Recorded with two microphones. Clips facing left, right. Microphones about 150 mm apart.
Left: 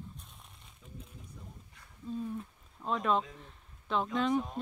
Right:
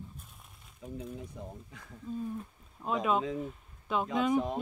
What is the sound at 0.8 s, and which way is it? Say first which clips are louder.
Speech: right 12 dB; 90° right.